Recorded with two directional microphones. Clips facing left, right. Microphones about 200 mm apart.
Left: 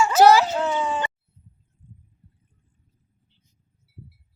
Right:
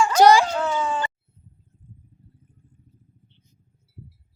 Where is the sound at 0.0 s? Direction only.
5° left (ahead or behind).